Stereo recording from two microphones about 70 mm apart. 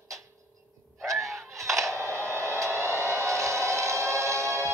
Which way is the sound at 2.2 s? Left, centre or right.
Right.